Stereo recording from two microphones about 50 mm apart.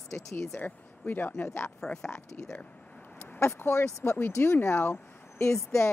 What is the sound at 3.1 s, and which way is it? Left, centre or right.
Speech, left.